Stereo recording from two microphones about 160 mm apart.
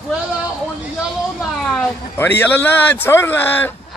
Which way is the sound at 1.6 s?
5° left (ahead or behind).